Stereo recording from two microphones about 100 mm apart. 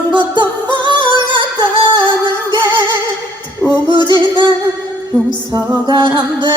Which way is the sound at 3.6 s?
Centre (ahead or behind).